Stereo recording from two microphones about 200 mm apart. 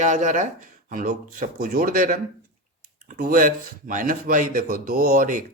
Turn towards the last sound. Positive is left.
turn(degrees=-40)  # may be behind; listen again after turning